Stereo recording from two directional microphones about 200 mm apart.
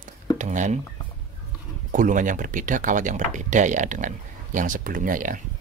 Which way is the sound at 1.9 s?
40° right (ahead or behind).